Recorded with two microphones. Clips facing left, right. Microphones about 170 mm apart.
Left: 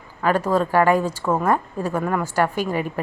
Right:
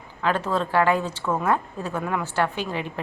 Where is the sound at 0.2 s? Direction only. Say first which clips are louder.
Left 5 dB; 10° left (ahead or behind).